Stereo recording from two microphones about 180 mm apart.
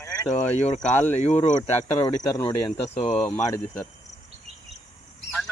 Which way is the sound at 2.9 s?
35° left (ahead or behind).